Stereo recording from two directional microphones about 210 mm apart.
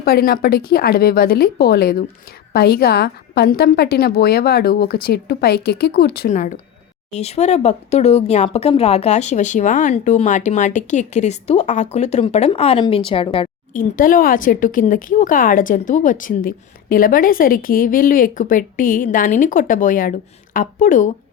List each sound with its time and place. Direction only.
0.0 s a woman's voice: 45° left (ahead or behind); by 13.5 s 25° left (ahead or behind)
13.7 s a woman's voice: 40° left (ahead or behind)